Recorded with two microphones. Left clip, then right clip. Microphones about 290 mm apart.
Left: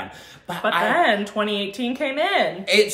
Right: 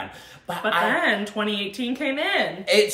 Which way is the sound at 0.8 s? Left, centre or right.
Centre.